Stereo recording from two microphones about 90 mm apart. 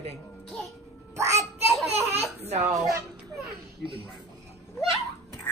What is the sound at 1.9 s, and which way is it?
Baby laughter, 20° right (ahead or behind).